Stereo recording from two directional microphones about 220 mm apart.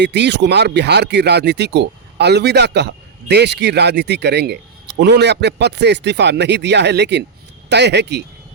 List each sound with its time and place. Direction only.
0.0 s speech: 50° right (ahead or behind)